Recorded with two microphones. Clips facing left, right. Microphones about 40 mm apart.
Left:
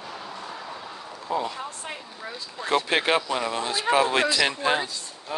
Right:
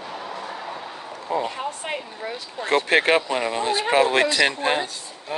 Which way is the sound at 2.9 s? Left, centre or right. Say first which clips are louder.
Right 7 dB; right.